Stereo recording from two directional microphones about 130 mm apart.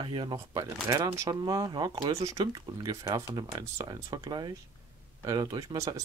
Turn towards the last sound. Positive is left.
turn(degrees=-30)  # may be behind; listen again after turning